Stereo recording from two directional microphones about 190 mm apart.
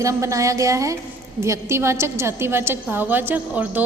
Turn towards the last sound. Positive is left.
turn(degrees=-10)  # may be behind; listen again after turning